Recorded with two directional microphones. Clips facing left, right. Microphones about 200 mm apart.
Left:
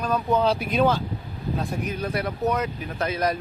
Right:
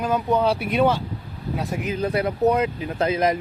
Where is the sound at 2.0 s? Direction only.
30° right (ahead or behind).